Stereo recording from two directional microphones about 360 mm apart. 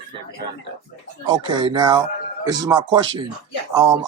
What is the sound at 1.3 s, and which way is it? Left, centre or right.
Speech, centre.